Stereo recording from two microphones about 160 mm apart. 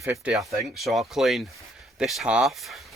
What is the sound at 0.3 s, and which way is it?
Speech, centre (ahead or behind).